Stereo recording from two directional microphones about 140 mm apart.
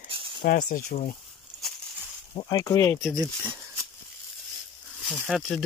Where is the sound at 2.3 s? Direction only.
30° left (ahead or behind).